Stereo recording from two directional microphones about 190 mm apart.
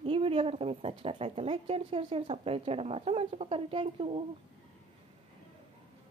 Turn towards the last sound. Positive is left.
turn(degrees=-30)  # may be behind; listen again after turning